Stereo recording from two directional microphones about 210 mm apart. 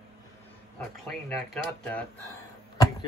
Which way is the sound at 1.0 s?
5° left (ahead or behind).